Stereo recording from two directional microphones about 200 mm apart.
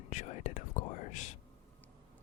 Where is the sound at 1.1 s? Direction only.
40° left (ahead or behind).